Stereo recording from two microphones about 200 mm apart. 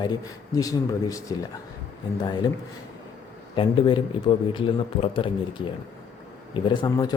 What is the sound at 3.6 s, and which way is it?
A man's voice, 25° left (ahead or behind).